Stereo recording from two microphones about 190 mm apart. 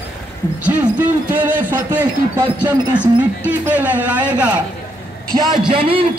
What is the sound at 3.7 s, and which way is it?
Speech, 10° right (ahead or behind).